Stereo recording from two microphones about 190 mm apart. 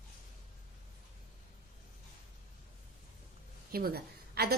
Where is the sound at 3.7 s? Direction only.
50° right (ahead or behind).